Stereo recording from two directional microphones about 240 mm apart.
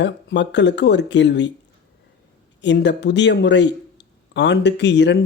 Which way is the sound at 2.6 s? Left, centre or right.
Left.